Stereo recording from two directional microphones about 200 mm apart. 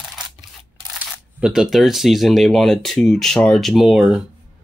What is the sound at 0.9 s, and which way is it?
Speech, 5° right (ahead or behind).